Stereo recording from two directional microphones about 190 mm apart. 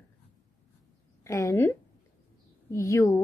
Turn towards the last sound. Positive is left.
turn(degrees=15)  # may be behind; listen again after turning